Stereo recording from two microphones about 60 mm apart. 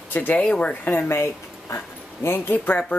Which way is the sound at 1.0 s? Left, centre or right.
Left.